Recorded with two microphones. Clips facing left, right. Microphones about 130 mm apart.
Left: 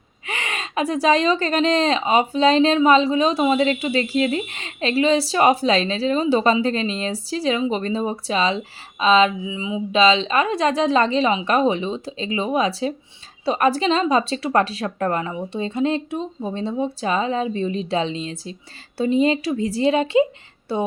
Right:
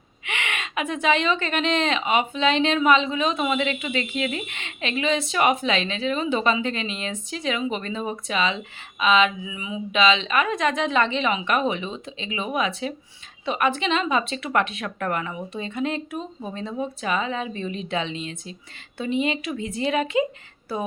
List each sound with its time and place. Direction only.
0.3 s a woman's voice: 35° left (ahead or behind)